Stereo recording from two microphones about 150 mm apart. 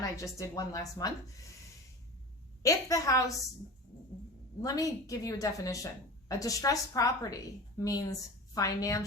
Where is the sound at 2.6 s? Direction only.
20° left (ahead or behind).